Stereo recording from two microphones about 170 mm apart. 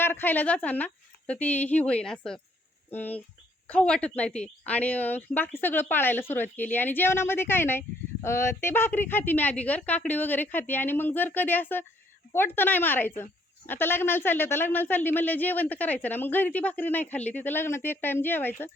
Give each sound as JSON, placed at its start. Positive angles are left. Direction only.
{"t": 0.0, "sound": "a woman's voice", "side_deg": 10}